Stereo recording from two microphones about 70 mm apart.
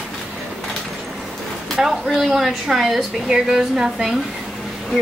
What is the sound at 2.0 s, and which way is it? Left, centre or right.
A woman's voice, centre.